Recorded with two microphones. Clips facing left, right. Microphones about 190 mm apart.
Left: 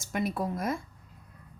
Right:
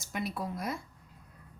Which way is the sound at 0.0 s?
50° left (ahead or behind).